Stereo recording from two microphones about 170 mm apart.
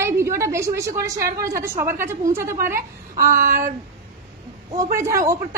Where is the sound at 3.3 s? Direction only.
55° right (ahead or behind).